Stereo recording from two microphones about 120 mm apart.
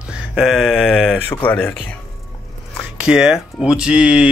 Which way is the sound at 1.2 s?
15° left (ahead or behind).